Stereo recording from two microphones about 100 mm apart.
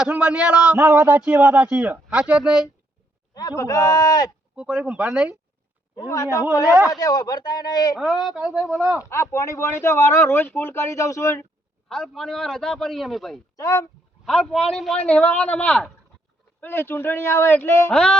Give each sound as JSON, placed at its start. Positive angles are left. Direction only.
{"t": 0.1, "sound": "a man's voice", "side_deg": -15}
{"t": 3.6, "sound": "speech", "side_deg": 35}
{"t": 4.5, "sound": "a man's voice", "side_deg": -10}
{"t": 6.0, "sound": "speech", "side_deg": 35}
{"t": 7.9, "sound": "a man's voice", "side_deg": -5}
{"t": 9.0, "sound": "speech", "side_deg": 30}
{"t": 11.9, "sound": "a man's voice", "side_deg": 5}
{"t": 13.6, "sound": "speech", "side_deg": 35}
{"t": 14.3, "sound": "a man's voice", "side_deg": 5}
{"t": 17.9, "sound": "a man's voice", "side_deg": 10}